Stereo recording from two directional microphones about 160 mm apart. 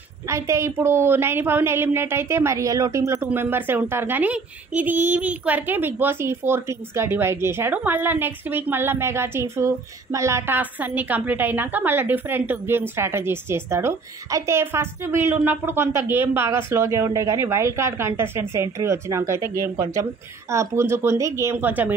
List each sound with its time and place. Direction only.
0.3 s a woman's voice: 20° right (ahead or behind)